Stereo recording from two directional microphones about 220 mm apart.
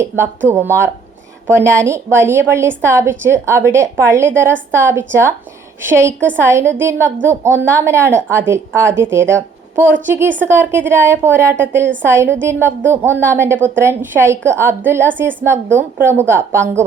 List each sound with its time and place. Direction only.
0.0 s a woman's voice: 10° right (ahead or behind)